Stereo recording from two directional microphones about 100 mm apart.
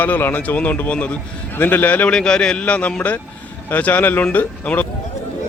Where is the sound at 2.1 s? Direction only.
10° left (ahead or behind).